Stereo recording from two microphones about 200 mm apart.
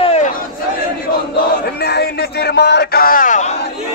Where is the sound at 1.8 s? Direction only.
55° left (ahead or behind); by 3.5 s 40° left (ahead or behind).